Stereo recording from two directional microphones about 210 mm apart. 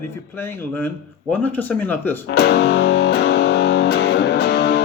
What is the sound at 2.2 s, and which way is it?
Music, 50° left (ahead or behind).